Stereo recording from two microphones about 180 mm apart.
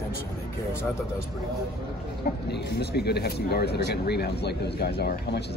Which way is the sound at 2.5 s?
65° left (ahead or behind).